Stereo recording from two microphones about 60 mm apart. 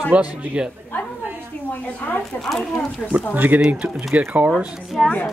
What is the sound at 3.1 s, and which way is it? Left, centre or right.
Speech, right.